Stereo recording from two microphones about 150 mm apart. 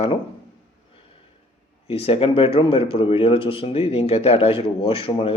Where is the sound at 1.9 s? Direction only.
40° left (ahead or behind).